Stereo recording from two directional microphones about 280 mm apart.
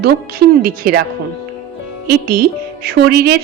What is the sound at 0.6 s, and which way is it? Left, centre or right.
Speech, right.